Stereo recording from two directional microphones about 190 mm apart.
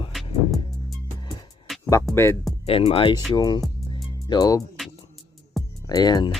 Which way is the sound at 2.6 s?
30° left (ahead or behind).